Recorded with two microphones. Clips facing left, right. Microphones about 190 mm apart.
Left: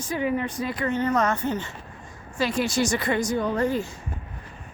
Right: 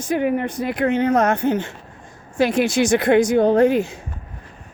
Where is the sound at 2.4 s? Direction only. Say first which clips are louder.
Right 6 dB; 55° right (ahead or behind).